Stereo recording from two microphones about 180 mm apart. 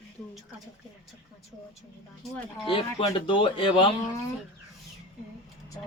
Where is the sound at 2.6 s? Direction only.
30° left (ahead or behind).